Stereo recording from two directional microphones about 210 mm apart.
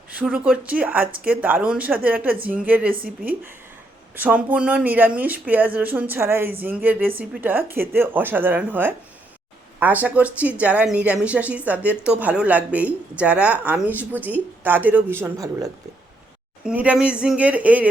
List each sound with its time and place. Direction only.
0.1 s speech: 5° right (ahead or behind)
16.6 s speech: 5° right (ahead or behind)